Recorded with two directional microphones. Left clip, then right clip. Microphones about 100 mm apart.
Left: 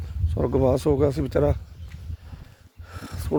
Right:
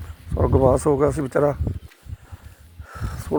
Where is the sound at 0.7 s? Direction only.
45° left (ahead or behind); by 1.6 s 65° left (ahead or behind).